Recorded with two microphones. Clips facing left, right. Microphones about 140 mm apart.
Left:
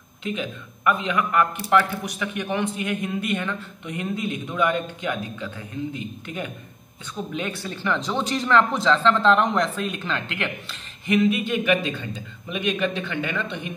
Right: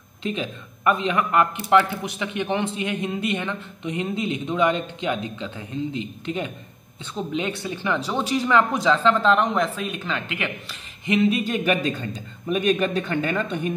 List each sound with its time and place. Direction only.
0.2 s a man's voice: 30° right (ahead or behind); by 10.8 s 5° right (ahead or behind)
11.1 s a man's voice: 30° right (ahead or behind)